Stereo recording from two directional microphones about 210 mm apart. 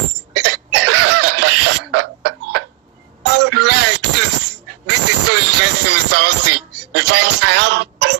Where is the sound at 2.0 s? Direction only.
90° right.